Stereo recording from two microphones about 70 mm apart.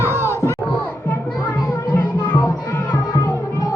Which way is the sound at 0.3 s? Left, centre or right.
Left.